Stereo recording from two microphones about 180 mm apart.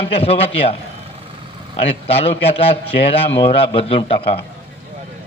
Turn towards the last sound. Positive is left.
turn(degrees=30)  # may be behind; listen again after turning